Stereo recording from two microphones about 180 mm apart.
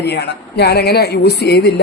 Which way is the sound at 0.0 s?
70° left (ahead or behind).